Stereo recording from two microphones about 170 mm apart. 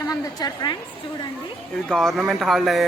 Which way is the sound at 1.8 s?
5° left (ahead or behind).